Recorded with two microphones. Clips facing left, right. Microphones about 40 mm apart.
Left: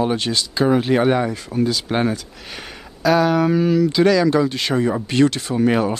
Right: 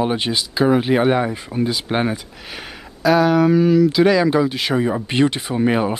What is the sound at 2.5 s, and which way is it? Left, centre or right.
Speech, centre.